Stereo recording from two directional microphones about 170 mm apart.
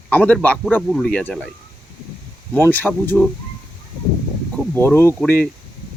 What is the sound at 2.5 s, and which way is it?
Speech, 10° left (ahead or behind).